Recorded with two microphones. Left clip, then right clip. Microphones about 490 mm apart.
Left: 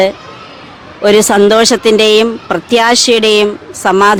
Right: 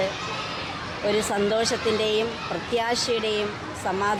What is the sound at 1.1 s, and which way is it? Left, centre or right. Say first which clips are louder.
A woman's voice: left 17 dB; left.